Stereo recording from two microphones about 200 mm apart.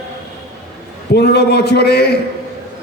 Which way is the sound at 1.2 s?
55° left (ahead or behind).